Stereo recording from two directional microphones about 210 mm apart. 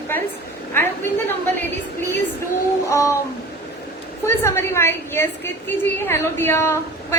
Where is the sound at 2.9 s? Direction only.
15° left (ahead or behind).